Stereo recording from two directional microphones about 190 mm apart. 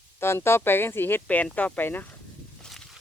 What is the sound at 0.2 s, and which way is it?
Speech, 15° left (ahead or behind).